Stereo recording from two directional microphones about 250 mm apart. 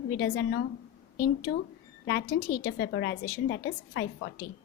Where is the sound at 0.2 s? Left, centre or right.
Left.